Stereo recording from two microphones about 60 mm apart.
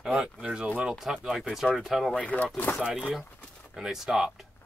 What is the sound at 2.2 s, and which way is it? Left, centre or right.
Speech, left.